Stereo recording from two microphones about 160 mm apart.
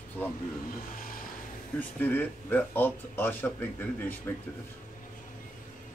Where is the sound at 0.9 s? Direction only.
60° left (ahead or behind).